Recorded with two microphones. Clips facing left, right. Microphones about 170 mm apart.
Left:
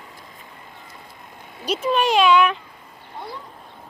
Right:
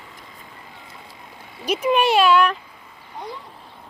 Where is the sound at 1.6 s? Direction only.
10° right (ahead or behind).